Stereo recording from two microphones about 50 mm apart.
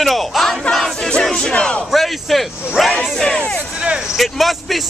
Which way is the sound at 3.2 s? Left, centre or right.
Centre.